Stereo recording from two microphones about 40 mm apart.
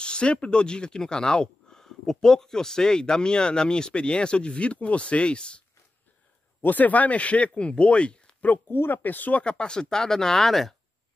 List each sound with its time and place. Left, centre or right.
0.0 s speech: left
6.6 s speech: left
8.6 s speech: left
9.0 s speech: left
9.4 s speech: left; by 10.8 s centre